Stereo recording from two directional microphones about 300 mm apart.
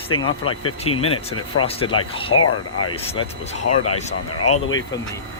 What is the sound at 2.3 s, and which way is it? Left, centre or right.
Speech, left.